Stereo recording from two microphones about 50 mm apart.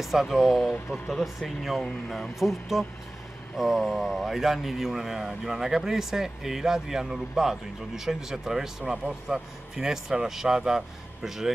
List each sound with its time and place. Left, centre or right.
0.0 s speech: centre
0.6 s speech: centre